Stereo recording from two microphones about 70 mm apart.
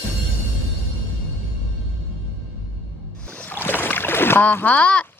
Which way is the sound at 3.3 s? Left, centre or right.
Left.